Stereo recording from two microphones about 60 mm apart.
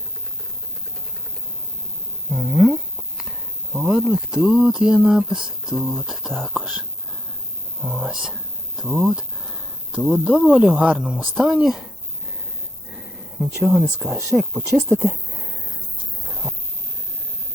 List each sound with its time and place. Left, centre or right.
2.3 s speech: centre
6.6 s speech: centre
7.9 s speech: centre
9.9 s speech: centre
11.0 s speech: centre
13.4 s speech: centre
14.3 s speech: right
14.7 s speech: right